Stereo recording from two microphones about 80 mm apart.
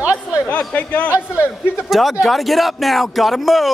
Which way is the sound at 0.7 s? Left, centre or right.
Centre.